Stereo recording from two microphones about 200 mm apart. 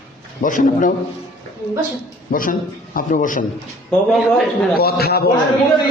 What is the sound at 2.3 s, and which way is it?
A man's voice, 45° left (ahead or behind).